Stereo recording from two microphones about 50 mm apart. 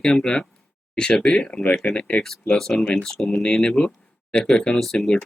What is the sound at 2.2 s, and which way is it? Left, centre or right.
Speech, centre.